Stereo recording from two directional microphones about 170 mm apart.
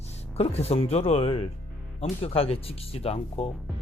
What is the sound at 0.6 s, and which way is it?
Speech, 35° left (ahead or behind).